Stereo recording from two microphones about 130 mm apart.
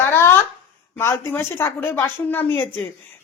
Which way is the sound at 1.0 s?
20° left (ahead or behind).